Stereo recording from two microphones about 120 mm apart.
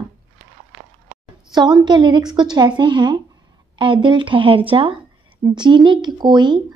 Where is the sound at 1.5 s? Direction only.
35° right (ahead or behind).